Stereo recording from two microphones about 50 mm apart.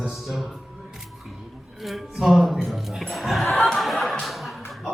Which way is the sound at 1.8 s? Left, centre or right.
Centre.